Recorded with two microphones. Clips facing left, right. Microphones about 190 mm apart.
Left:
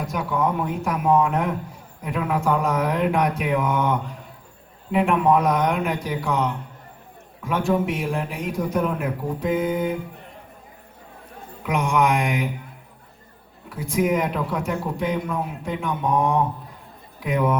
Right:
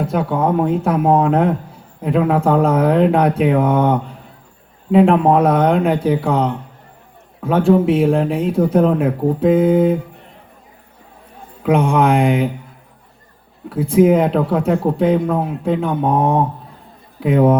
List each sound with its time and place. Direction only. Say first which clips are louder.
0.0 s speech: right 6 dB; 30° right (ahead or behind)
11.6 s speech: right 7 dB; 30° right (ahead or behind)
13.9 s speech: right 9 dB; 30° right (ahead or behind)